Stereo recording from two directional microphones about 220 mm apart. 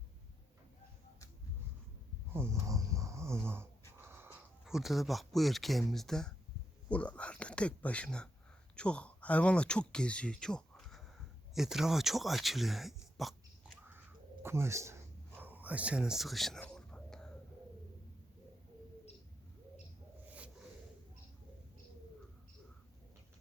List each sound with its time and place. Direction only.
2.3 s snoring: 10° right (ahead or behind)
6.9 s speech: 5° left (ahead or behind); by 14.9 s 10° right (ahead or behind)
15.4 s a sound: 10° right (ahead or behind)